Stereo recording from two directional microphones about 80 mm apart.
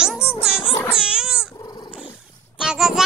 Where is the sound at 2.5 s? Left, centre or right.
Centre.